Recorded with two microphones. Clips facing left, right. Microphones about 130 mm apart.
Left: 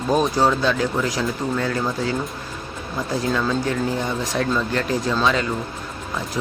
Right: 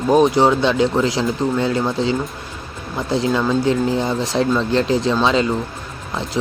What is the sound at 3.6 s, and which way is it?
Speech, 30° right (ahead or behind).